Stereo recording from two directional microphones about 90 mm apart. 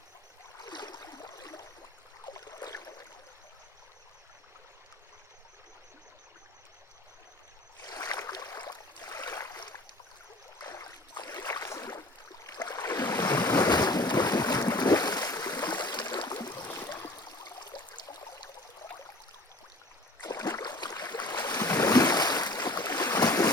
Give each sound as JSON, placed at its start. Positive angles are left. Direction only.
{"t": 0.6, "sound": "stream", "side_deg": 50}
{"t": 2.2, "sound": "boat", "side_deg": 45}
{"t": 7.8, "sound": "boat", "side_deg": 45}
{"t": 12.5, "sound": "boat", "side_deg": 50}
{"t": 16.6, "sound": "stream", "side_deg": 25}
{"t": 17.2, "sound": "stream", "side_deg": 50}
{"t": 20.2, "sound": "boat", "side_deg": 45}